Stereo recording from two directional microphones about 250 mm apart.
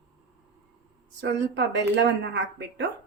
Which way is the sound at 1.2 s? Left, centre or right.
Right.